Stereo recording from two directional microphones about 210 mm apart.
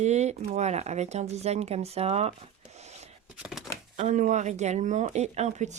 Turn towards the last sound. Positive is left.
turn(degrees=-35)  # may be behind; listen again after turning